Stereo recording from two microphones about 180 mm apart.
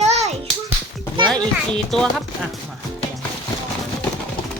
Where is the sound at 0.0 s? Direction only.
35° right (ahead or behind).